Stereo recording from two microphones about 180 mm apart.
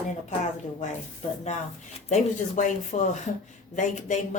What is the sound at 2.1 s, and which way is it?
Speech, 45° left (ahead or behind).